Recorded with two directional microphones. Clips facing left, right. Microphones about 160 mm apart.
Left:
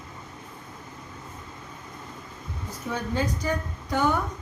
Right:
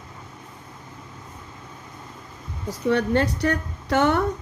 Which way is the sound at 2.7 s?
75° right (ahead or behind).